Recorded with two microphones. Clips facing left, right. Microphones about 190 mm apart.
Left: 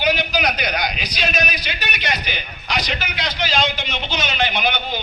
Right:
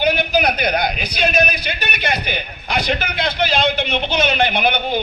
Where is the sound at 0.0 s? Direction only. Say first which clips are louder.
Right 3 dB; 55° right (ahead or behind).